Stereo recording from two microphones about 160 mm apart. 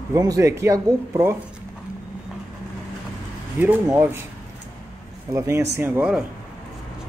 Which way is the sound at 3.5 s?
15° right (ahead or behind).